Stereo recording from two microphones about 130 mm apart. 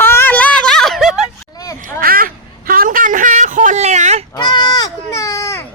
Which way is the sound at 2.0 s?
90° right.